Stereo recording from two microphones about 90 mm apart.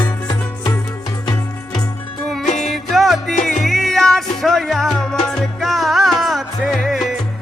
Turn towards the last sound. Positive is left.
turn(degrees=0)  # may be behind; listen again after turning